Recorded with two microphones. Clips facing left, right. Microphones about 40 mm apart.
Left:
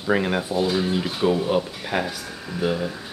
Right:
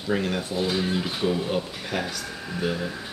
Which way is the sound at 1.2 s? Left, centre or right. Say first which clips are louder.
Left 6 dB; centre.